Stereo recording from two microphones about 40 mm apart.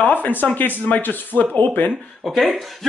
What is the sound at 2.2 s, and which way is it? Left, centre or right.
Speech, centre.